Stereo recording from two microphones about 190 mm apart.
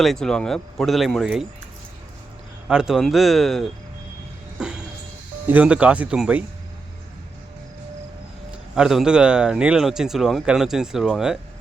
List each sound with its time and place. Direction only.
0.0 s speech: centre (ahead or behind)
2.6 s speech: 5° right (ahead or behind)
5.5 s speech: 5° right (ahead or behind)
8.7 s speech: centre (ahead or behind)